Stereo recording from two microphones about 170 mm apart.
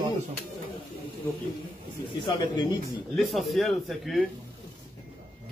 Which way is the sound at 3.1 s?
Centre (ahead or behind).